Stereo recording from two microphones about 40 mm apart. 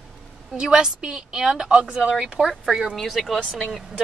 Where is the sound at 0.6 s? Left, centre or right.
Right.